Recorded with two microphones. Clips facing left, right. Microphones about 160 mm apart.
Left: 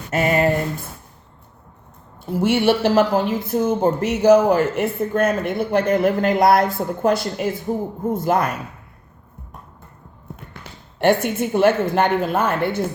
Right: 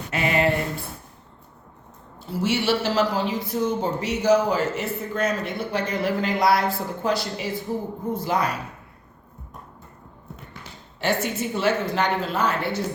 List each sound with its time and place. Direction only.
0.1 s speech: 45° left (ahead or behind)
2.2 s speech: 55° left (ahead or behind)
10.3 s a woman's voice: 55° left (ahead or behind)